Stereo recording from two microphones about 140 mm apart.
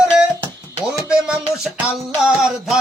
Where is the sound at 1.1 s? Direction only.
5° right (ahead or behind).